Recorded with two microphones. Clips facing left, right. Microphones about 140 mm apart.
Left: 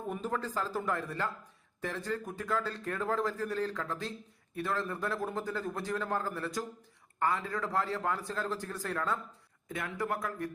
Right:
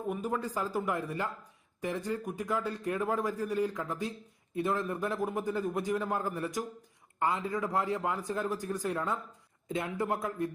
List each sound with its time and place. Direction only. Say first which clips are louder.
0.1 s a man's voice: right 1 dB; 10° right (ahead or behind)